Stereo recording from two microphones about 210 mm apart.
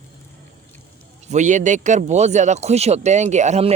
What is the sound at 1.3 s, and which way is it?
Speech, 35° right (ahead or behind).